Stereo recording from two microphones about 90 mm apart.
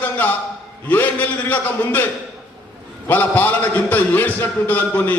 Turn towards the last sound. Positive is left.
turn(degrees=20)  # may be behind; listen again after turning